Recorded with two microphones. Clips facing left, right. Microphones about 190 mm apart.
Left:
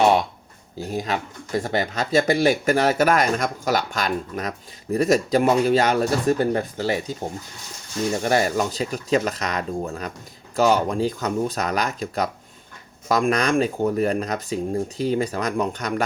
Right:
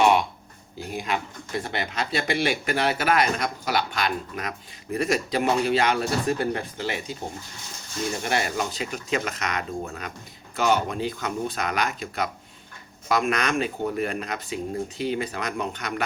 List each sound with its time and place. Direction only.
0.8 s speech: 40° left (ahead or behind)
8.2 s speech: 40° left (ahead or behind)